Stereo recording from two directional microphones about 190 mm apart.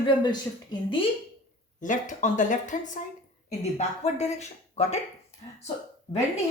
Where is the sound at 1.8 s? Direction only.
40° left (ahead or behind).